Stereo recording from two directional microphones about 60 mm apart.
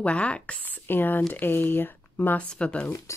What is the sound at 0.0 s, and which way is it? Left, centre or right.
Speech, centre.